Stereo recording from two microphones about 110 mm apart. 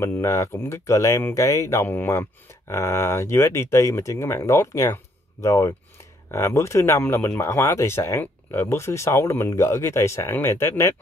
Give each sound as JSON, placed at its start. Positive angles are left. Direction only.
{"t": 0.0, "sound": "speech", "side_deg": 25}